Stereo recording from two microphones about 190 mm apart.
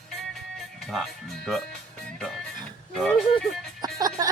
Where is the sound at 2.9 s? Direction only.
5° left (ahead or behind).